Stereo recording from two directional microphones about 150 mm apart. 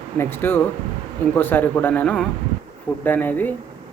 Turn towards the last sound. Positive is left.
turn(degrees=10)  # may be behind; listen again after turning